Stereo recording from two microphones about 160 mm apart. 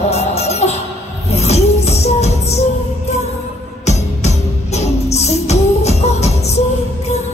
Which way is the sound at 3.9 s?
45° left (ahead or behind).